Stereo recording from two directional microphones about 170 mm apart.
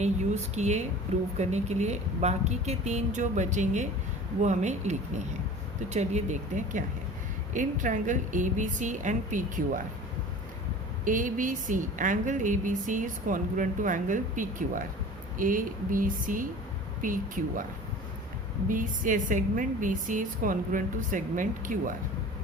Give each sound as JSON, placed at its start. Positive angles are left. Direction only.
{"t": 0.5, "sound": "a woman's voice", "side_deg": -40}
{"t": 7.5, "sound": "a woman's voice", "side_deg": -50}
{"t": 11.0, "sound": "a woman's voice", "side_deg": -50}
{"t": 18.7, "sound": "a woman's voice", "side_deg": -50}